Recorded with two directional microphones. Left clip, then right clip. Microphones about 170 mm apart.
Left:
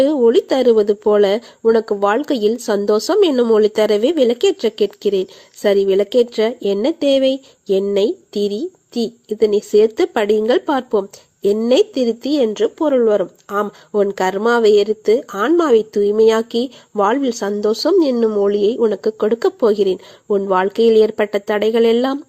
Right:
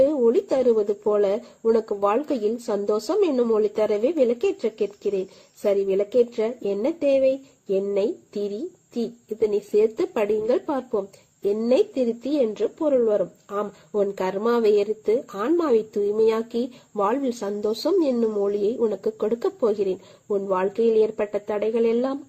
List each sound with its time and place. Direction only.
0.0 s speech: 30° left (ahead or behind)